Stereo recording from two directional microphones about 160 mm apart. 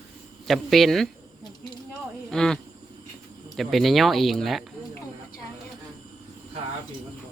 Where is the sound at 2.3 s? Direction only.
5° left (ahead or behind).